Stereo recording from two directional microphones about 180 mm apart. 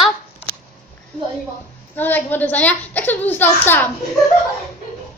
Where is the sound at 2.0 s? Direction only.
10° left (ahead or behind).